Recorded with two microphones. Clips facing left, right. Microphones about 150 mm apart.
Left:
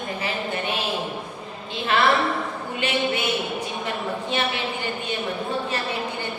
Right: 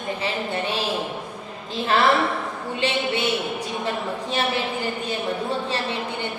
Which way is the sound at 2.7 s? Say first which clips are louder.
Even; 30° right (ahead or behind).